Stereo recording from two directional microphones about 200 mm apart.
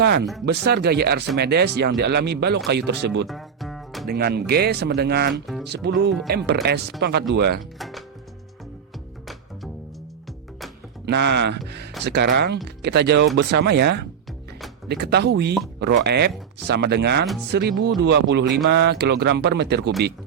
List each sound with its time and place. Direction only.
0.0 s speech: 55° right (ahead or behind)
3.2 s music: centre (ahead or behind)
4.1 s speech: 50° right (ahead or behind)
7.8 s speech: centre (ahead or behind)
11.0 s speech: 60° right (ahead or behind)